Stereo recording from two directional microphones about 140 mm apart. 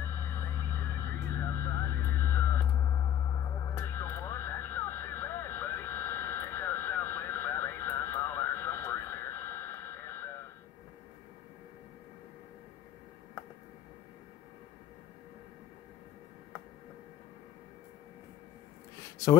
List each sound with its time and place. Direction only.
0.0 s vehicle: 15° left (ahead or behind)
3.7 s radio: 15° left (ahead or behind)